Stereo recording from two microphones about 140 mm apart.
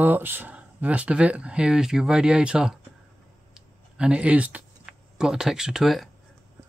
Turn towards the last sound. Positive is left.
turn(degrees=0)  # may be behind; listen again after turning